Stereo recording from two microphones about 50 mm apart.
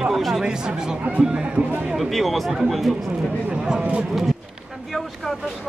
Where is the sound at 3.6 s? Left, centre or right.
Centre.